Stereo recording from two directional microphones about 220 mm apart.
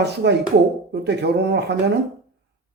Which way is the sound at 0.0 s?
50° right (ahead or behind).